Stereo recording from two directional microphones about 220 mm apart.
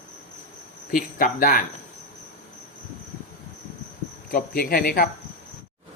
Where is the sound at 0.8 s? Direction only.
40° left (ahead or behind).